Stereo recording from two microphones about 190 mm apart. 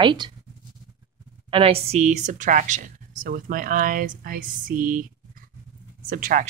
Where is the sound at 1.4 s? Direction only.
30° right (ahead or behind); by 5.1 s 45° right (ahead or behind).